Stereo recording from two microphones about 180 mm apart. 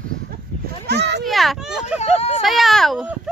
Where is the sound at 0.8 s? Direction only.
65° right (ahead or behind).